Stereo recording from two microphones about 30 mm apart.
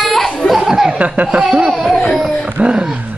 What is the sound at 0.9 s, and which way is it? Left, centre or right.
Speech, right.